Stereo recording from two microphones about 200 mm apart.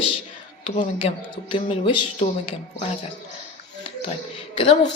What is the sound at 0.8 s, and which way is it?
Speech, 40° left (ahead or behind).